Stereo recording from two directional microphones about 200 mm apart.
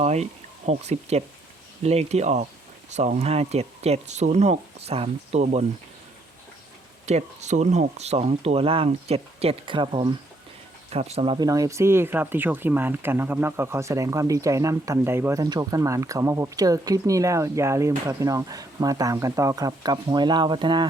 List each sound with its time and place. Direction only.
0.0 s speech: 35° right (ahead or behind)
7.0 s speech: 35° right (ahead or behind)